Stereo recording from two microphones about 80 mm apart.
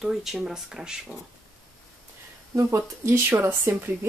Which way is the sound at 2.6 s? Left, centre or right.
Right.